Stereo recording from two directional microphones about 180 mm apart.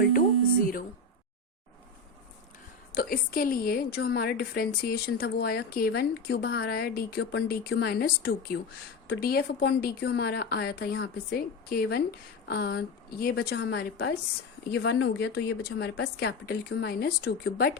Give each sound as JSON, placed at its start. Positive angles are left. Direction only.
{"t": 0.0, "sound": "a sound", "side_deg": 50}
{"t": 2.9, "sound": "a woman's voice", "side_deg": 55}
{"t": 14.7, "sound": "a woman's voice", "side_deg": 80}